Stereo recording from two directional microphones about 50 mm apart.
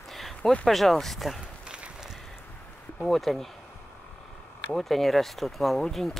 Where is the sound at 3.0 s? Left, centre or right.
Centre.